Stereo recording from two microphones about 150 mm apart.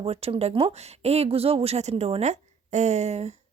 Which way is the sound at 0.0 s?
40° right (ahead or behind).